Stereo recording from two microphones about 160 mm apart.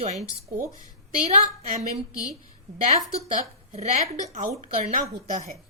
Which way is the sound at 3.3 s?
45° right (ahead or behind).